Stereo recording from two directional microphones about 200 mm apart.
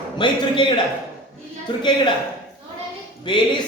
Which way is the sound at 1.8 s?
25° left (ahead or behind).